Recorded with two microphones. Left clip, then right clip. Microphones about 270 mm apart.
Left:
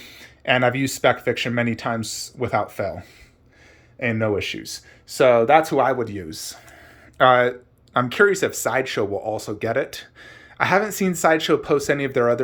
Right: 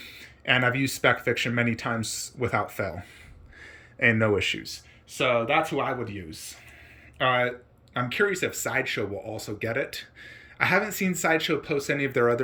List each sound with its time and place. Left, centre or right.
0.0 s speech: centre
2.0 s speech: left
2.4 s speech: centre
4.6 s speech: centre